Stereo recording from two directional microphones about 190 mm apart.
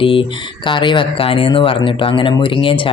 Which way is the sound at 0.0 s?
30° left (ahead or behind).